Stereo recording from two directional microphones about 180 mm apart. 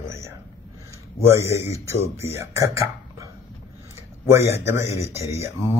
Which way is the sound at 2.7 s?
15° right (ahead or behind).